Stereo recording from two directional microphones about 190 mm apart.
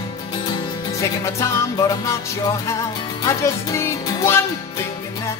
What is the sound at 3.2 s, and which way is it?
Speech, 15° left (ahead or behind).